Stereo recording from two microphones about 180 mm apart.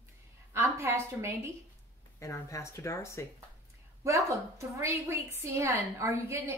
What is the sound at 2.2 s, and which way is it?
Speech, 15° left (ahead or behind).